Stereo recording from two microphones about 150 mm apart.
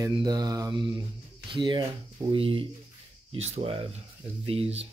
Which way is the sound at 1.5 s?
30° right (ahead or behind).